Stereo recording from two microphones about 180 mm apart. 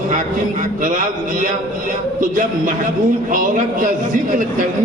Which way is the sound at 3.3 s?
45° right (ahead or behind).